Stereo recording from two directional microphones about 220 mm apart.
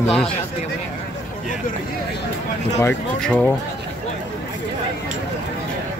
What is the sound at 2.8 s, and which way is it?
Speech, 5° left (ahead or behind).